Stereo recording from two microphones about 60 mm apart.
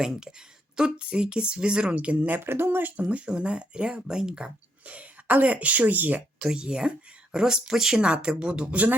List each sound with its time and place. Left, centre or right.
0.0 s speech: centre
2.4 s speech: right; by 4.5 s centre
4.9 s speech: right
6.4 s speech: centre